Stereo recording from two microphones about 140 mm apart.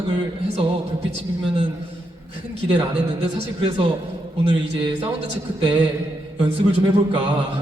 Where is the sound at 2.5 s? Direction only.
45° right (ahead or behind).